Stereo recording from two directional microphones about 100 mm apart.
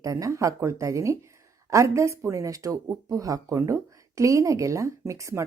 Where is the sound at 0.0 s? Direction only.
35° right (ahead or behind).